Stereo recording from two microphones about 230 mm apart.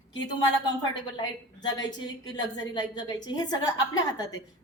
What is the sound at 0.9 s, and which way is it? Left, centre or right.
A woman's voice, centre.